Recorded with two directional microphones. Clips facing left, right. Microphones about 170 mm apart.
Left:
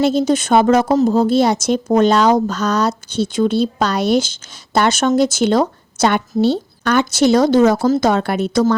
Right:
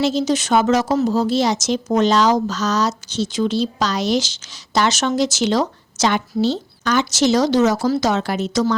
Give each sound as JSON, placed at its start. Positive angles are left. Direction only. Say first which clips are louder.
{"t": 0.0, "sound": "speech", "louder": "left 4 dB", "side_deg": 55}